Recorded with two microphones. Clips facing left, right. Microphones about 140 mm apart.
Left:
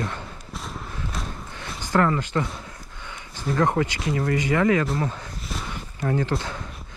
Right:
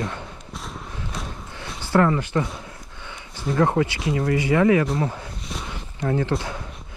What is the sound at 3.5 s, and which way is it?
Speech, 30° right (ahead or behind).